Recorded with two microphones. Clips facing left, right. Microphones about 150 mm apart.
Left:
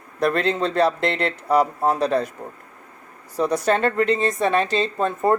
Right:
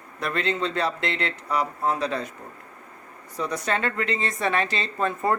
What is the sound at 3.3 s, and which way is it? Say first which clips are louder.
Speech: left 7 dB; 35° left (ahead or behind).